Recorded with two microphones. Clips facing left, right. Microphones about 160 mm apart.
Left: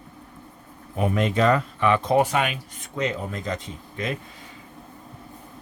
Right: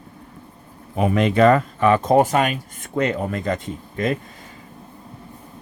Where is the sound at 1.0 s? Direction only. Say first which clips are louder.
Right 5 dB; 75° right (ahead or behind); by 4.1 s 50° right (ahead or behind).